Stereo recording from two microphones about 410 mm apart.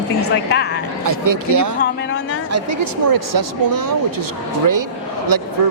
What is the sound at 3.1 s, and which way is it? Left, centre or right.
Speech, right.